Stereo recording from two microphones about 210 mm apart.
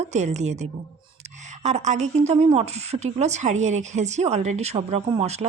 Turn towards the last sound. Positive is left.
turn(degrees=-30)  # may be behind; listen again after turning